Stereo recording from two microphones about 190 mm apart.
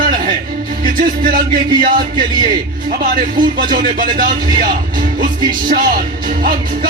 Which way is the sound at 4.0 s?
45° right (ahead or behind).